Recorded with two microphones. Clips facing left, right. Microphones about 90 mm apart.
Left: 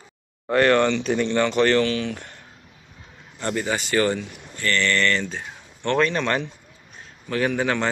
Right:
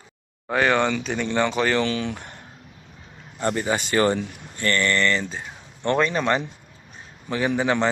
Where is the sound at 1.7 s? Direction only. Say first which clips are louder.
Left 2 dB; 20° right (ahead or behind).